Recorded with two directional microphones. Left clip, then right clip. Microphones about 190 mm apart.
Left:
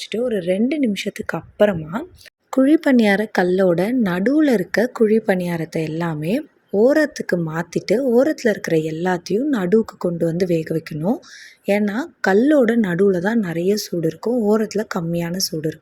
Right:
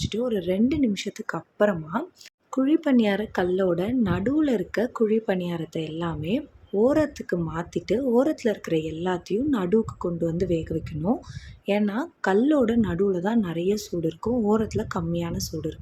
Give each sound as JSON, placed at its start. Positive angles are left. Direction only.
{"t": 0.0, "sound": "speech", "side_deg": 10}
{"t": 2.6, "sound": "a woman's voice", "side_deg": 25}